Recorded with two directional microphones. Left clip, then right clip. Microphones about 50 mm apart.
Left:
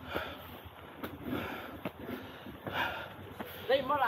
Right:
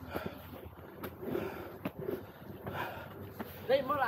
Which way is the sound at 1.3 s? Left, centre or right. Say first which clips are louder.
Even; centre.